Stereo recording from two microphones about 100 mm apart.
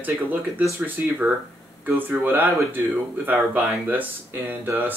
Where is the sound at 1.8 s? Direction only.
25° right (ahead or behind).